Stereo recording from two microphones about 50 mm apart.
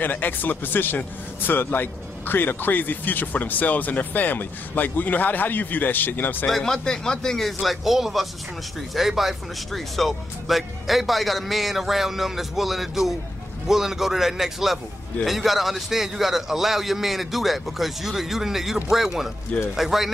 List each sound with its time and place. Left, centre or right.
0.0 s a man's voice: left
6.4 s speech: centre
7.4 s a man's voice: centre